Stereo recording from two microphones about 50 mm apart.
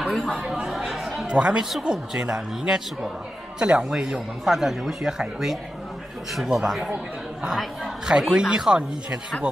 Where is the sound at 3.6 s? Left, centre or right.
Centre.